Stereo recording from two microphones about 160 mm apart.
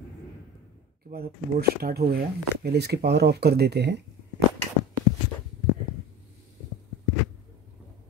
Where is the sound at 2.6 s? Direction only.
90° right.